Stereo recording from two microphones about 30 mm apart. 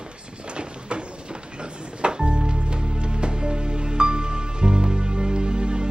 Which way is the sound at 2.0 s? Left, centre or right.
Right.